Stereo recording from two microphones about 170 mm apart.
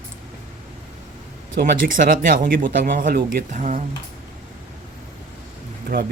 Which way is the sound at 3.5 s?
45° right (ahead or behind).